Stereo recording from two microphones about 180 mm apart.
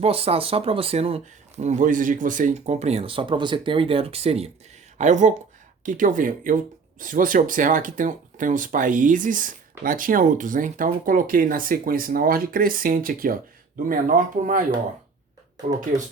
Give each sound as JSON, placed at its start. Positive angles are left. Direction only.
{"t": 0.0, "sound": "speech", "side_deg": -35}